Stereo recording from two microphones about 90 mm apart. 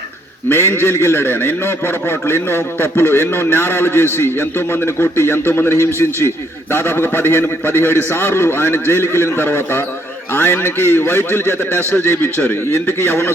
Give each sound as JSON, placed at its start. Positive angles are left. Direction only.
{"t": 0.4, "sound": "a man's voice", "side_deg": 25}